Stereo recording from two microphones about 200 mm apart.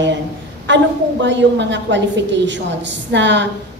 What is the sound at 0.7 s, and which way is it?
A woman's voice, 65° right (ahead or behind).